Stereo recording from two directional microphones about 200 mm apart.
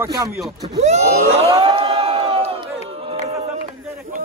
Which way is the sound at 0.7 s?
35° right (ahead or behind).